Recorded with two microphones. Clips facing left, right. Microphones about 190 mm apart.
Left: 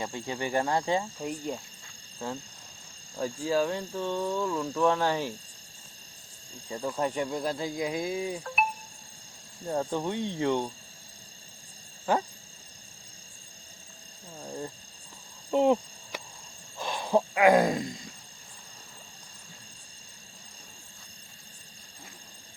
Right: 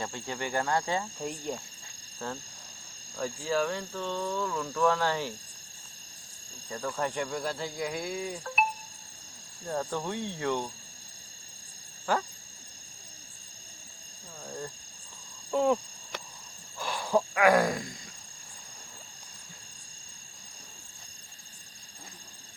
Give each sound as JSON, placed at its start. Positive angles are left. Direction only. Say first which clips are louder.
{"t": 0.0, "sound": "speech", "louder": "left 2 dB", "side_deg": 20}
{"t": 1.2, "sound": "speech", "louder": "left 1 dB", "side_deg": 5}
{"t": 2.1, "sound": "speech", "louder": "left 2 dB", "side_deg": 20}
{"t": 6.7, "sound": "speech", "louder": "left 2 dB", "side_deg": 20}
{"t": 9.6, "sound": "speech", "louder": "left 3 dB", "side_deg": 20}
{"t": 12.1, "sound": "speech", "louder": "left 2 dB", "side_deg": 20}
{"t": 15.5, "sound": "speech", "louder": "left 3 dB", "side_deg": 20}
{"t": 16.7, "sound": "a sound", "louder": "left 2 dB", "side_deg": 20}